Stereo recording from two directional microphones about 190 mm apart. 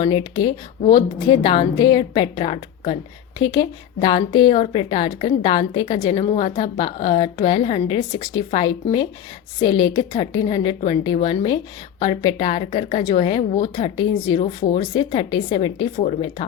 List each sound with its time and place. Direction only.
0.1 s a woman's voice: 25° left (ahead or behind)